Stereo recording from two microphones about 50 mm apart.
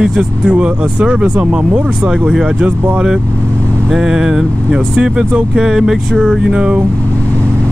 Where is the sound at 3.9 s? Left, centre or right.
Centre.